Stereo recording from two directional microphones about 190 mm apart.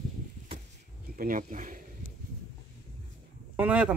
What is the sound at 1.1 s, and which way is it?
Speech, 45° right (ahead or behind).